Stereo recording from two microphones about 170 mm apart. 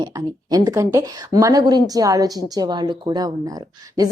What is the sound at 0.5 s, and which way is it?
A woman's voice, 20° right (ahead or behind).